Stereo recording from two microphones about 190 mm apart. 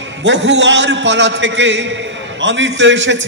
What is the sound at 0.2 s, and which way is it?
A man's voice, 70° right (ahead or behind).